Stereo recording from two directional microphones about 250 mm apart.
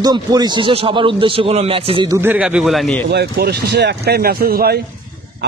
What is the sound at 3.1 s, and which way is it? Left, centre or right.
A man's voice, right.